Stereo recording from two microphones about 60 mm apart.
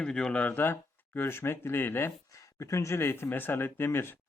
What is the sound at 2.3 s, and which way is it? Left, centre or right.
Speech, left.